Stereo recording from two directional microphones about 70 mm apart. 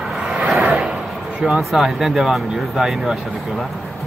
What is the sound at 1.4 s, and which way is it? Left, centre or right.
Speech, centre.